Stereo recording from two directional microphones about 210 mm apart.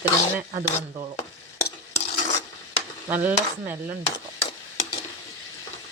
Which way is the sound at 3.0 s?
10° right (ahead or behind).